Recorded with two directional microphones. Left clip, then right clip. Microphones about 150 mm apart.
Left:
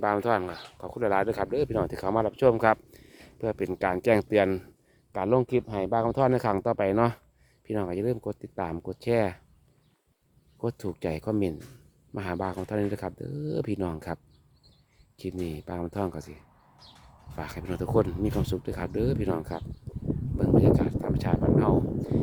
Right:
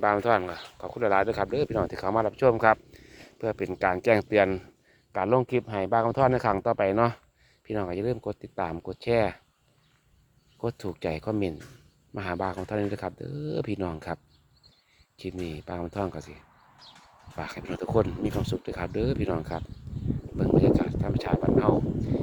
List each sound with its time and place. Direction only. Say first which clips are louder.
0.0 s speech: right 2 dB; 40° left (ahead or behind)
10.6 s speech: even; 50° left (ahead or behind)
15.2 s speech: left 1 dB; 55° left (ahead or behind)
17.3 s speech: even; 50° left (ahead or behind)